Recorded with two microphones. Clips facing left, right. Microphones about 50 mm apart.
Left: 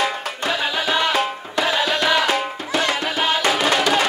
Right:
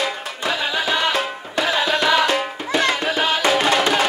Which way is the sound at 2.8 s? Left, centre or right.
Right.